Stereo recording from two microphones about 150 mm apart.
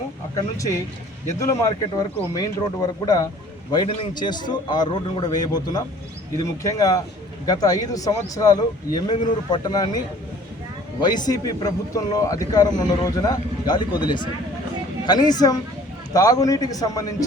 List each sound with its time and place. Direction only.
0.3 s speech: 20° left (ahead or behind)
11.0 s speech: 30° left (ahead or behind)